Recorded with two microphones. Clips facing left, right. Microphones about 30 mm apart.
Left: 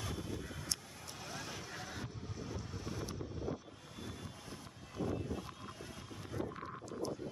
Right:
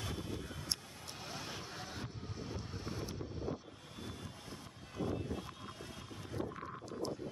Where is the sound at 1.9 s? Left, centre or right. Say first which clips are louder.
Even; right.